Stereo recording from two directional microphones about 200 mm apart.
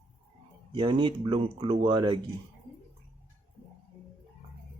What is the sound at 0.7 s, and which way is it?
Speech, 25° right (ahead or behind).